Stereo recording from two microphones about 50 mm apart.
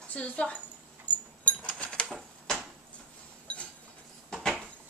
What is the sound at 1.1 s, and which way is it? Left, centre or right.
Chink, left.